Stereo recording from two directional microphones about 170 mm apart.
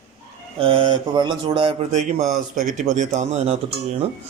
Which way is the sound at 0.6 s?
30° right (ahead or behind).